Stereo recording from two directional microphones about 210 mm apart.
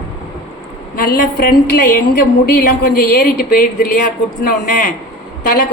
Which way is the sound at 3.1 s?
40° left (ahead or behind).